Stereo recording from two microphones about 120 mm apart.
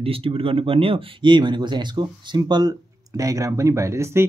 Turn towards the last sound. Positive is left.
turn(degrees=-25)  # may be behind; listen again after turning